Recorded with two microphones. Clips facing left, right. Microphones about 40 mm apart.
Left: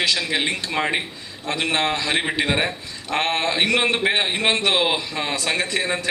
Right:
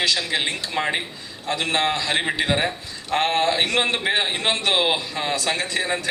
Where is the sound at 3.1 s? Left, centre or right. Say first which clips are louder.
Right 1 dB; left.